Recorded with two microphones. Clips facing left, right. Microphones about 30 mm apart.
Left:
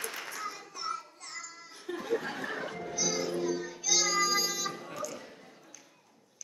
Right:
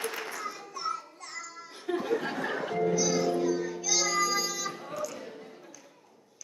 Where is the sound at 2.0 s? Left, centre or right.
Centre.